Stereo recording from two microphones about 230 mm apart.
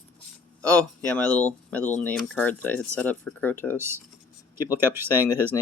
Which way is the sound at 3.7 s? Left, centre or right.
Centre.